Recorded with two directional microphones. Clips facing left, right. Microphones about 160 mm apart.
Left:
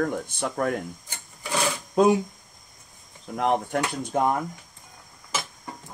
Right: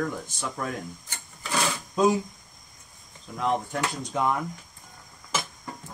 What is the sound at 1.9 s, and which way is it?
Speech, 60° left (ahead or behind).